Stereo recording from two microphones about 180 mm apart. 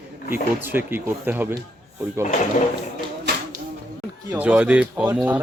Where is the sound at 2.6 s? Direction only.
45° left (ahead or behind).